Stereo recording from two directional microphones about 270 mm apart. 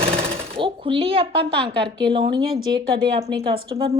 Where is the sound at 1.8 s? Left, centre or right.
Centre.